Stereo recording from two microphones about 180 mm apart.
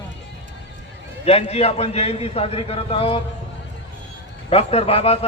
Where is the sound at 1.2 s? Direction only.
35° left (ahead or behind).